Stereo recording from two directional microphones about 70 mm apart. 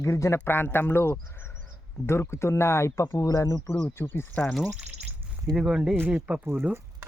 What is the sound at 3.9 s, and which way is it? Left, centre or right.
Speech, left.